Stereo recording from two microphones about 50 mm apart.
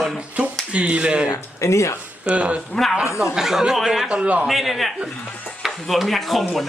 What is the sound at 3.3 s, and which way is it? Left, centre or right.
Speech, centre.